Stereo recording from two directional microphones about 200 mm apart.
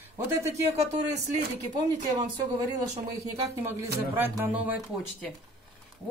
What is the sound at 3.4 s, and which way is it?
Speech, 15° right (ahead or behind).